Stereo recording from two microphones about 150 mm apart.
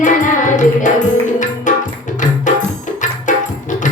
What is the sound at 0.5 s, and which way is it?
Music, 55° left (ahead or behind).